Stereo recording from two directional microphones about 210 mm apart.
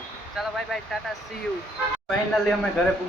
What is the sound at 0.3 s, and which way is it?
A woman's voice, centre (ahead or behind).